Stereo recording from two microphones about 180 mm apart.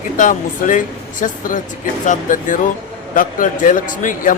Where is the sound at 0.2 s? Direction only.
45° left (ahead or behind).